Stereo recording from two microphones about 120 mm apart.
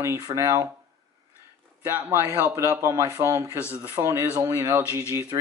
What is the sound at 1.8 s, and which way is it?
Speech, 20° right (ahead or behind).